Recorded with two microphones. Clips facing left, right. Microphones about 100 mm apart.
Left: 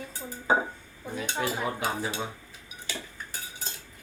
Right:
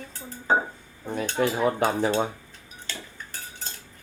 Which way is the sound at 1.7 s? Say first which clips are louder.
Right 8 dB; 55° right (ahead or behind).